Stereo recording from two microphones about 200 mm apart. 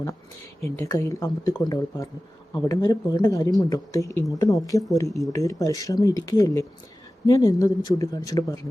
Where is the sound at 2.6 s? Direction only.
15° left (ahead or behind).